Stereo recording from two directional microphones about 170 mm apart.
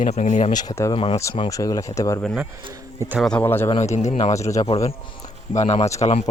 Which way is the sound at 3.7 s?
40° left (ahead or behind).